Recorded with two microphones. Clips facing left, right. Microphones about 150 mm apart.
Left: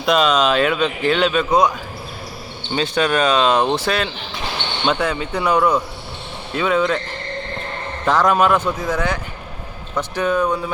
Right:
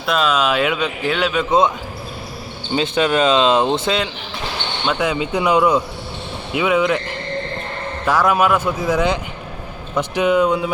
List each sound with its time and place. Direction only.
0.0 s speech: 5° right (ahead or behind)
1.5 s speech: 25° right (ahead or behind)
2.7 s speech: 20° right (ahead or behind)
8.0 s speech: 10° right (ahead or behind)